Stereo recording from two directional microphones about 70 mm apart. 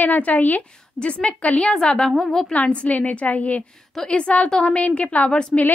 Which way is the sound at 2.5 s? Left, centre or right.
Centre.